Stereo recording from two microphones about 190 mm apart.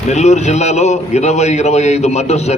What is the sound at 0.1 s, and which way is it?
A man's voice, 35° left (ahead or behind).